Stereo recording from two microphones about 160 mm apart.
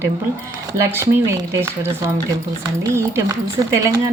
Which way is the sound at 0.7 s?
20° right (ahead or behind).